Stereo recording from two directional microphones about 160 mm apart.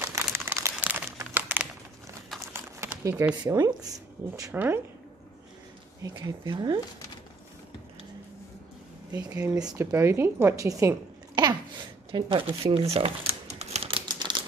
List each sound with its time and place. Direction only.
0.0 s crumpling: 15° right (ahead or behind)
1.3 s typing: 10° right (ahead or behind)
2.5 s a sound: 15° right (ahead or behind)
3.4 s a woman's voice: 25° right (ahead or behind)
6.1 s speech: 25° right (ahead or behind)
9.1 s a woman's voice: 10° right (ahead or behind)
12.1 s crumpling: 30° right (ahead or behind)